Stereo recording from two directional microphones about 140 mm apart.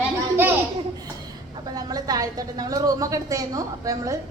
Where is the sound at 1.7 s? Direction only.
25° right (ahead or behind).